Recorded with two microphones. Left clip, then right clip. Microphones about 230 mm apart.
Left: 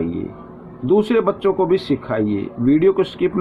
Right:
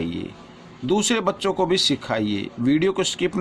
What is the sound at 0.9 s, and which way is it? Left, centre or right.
Speech, right.